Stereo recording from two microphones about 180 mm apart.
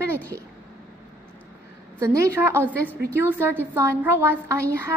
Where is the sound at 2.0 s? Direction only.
15° right (ahead or behind).